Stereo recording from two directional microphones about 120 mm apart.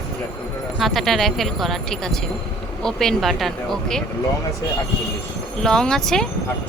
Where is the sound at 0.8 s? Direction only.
Centre (ahead or behind).